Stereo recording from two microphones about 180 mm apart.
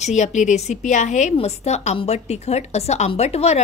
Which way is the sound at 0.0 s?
40° left (ahead or behind).